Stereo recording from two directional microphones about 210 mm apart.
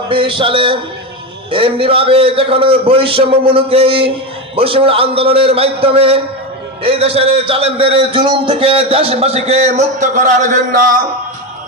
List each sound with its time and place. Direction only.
0.1 s a man's voice: 25° right (ahead or behind)